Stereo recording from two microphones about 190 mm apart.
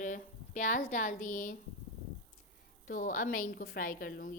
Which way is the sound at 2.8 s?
45° left (ahead or behind).